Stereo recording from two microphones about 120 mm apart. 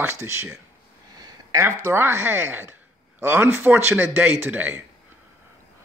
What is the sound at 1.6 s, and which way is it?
A man's voice, 20° right (ahead or behind).